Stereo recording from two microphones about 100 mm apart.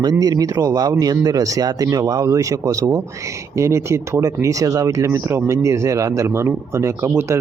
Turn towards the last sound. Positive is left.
turn(degrees=-25)  # may be behind; listen again after turning